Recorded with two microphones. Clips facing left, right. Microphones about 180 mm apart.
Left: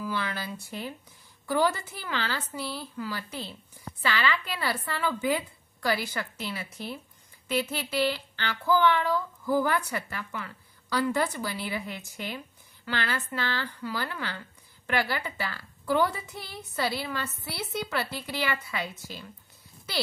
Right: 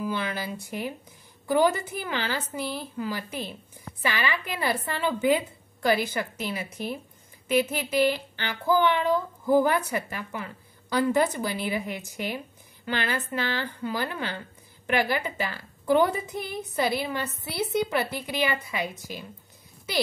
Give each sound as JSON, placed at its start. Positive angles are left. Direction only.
{"t": 0.0, "sound": "speech", "side_deg": -20}